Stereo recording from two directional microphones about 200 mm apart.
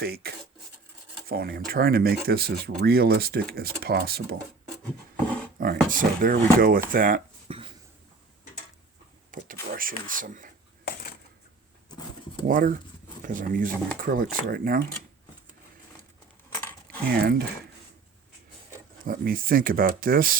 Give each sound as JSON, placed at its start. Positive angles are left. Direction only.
{"t": 0.0, "sound": "speech", "side_deg": -50}
{"t": 5.5, "sound": "speech", "side_deg": -45}
{"t": 9.3, "sound": "speech", "side_deg": -45}
{"t": 12.5, "sound": "speech", "side_deg": -45}
{"t": 17.2, "sound": "speech", "side_deg": -50}
{"t": 19.0, "sound": "speech", "side_deg": -45}